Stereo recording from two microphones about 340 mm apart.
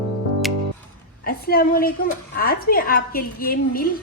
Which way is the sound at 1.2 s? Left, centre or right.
Left.